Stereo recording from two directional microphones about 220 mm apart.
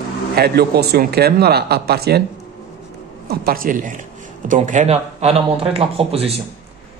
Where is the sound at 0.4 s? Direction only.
45° right (ahead or behind).